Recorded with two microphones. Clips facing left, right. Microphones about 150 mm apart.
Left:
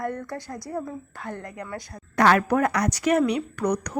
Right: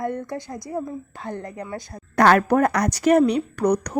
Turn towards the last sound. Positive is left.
turn(degrees=-35)  # may be behind; listen again after turning